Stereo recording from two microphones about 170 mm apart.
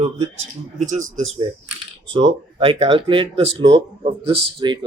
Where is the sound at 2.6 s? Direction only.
35° right (ahead or behind).